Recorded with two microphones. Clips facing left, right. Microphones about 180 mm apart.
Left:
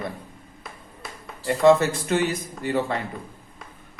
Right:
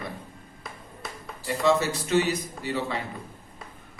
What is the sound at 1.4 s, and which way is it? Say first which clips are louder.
A man's voice: left 6 dB; 50° left (ahead or behind).